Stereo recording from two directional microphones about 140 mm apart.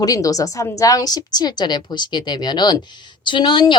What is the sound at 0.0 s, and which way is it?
A woman's voice, 25° left (ahead or behind).